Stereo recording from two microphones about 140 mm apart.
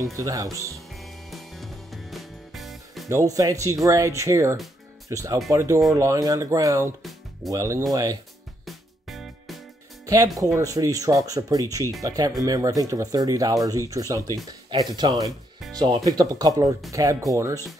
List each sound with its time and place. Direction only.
0.0 s speech: 25° right (ahead or behind)
0.7 s music: centre (ahead or behind)
3.1 s speech: 25° right (ahead or behind)
7.0 s music: centre (ahead or behind)
7.5 s speech: 25° right (ahead or behind)
8.6 s music: centre (ahead or behind)
10.0 s speech: 25° right (ahead or behind)
15.6 s music: centre (ahead or behind)
16.1 s speech: 25° right (ahead or behind)